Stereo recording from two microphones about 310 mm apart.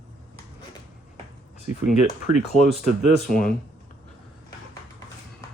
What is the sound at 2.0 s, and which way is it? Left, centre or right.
Speech, left.